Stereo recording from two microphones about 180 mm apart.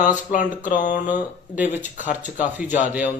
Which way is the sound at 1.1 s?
10° right (ahead or behind).